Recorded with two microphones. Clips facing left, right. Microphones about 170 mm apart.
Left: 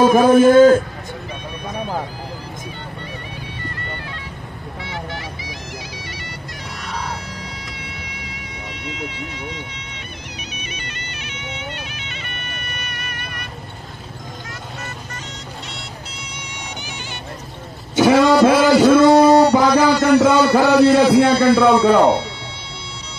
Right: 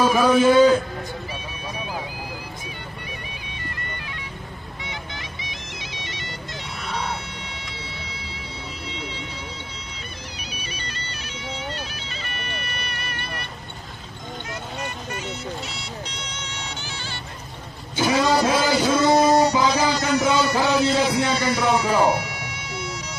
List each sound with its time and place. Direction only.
0.0 s a man's voice: 50° left (ahead or behind)
4.8 s music: 20° right (ahead or behind)
7.8 s music: 30° right (ahead or behind)
8.8 s a sound: 30° right (ahead or behind)
10.6 s bagpipes: 35° right (ahead or behind)
15.7 s music: 5° left (ahead or behind)
17.9 s a sound: 65° left (ahead or behind)
20.2 s a man's voice: 60° left (ahead or behind)
22.1 s music: 30° left (ahead or behind)